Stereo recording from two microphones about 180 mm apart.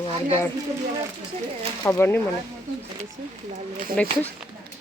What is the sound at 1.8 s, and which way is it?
Speech, 10° left (ahead or behind).